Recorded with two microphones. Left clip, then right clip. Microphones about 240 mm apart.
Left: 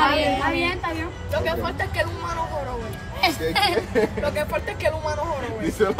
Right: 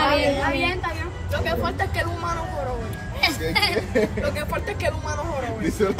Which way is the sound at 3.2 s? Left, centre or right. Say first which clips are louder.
Left 1 dB; centre.